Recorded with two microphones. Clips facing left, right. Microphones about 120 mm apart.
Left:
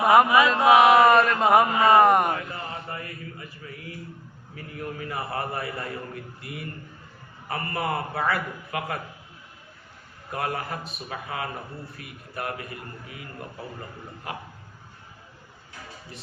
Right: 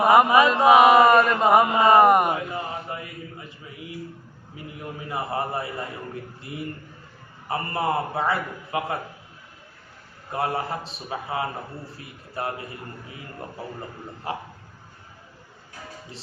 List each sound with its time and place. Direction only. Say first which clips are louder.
0.0 s mantra: right 1 dB; centre (ahead or behind)
0.4 s mantra: right 2 dB; 10° right (ahead or behind)
0.7 s mantra: right 1 dB; centre (ahead or behind)
1.6 s a man's voice: right 2 dB; 20° right (ahead or behind)
2.0 s mantra: right 2 dB; 5° right (ahead or behind)
4.5 s a man's voice: left 1 dB; 20° right (ahead or behind)
10.3 s a man's voice: right 3 dB; 25° right (ahead or behind)
14.3 s speech: right 5 dB; 30° right (ahead or behind)